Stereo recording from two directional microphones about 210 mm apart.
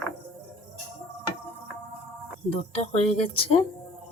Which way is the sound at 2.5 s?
30° left (ahead or behind).